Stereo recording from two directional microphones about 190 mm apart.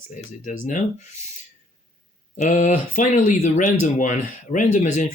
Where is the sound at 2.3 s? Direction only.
40° left (ahead or behind).